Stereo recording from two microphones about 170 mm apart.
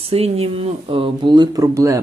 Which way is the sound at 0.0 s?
35° right (ahead or behind).